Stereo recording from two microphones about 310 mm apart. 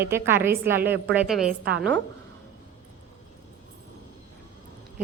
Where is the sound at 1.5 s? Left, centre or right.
Right.